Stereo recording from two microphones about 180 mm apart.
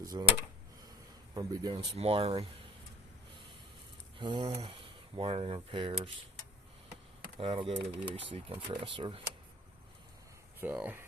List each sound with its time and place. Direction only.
0.0 s speech: 20° right (ahead or behind)
1.3 s speech: 20° right (ahead or behind)
4.2 s speech: 25° right (ahead or behind)
7.3 s speech: 30° right (ahead or behind)
10.6 s speech: 10° right (ahead or behind)